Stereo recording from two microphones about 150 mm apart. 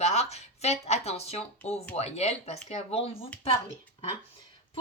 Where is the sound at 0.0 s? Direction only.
45° left (ahead or behind).